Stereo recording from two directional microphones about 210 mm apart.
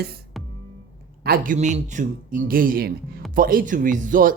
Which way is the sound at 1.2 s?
45° right (ahead or behind).